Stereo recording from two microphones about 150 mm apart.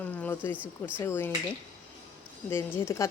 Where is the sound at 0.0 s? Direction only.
10° left (ahead or behind).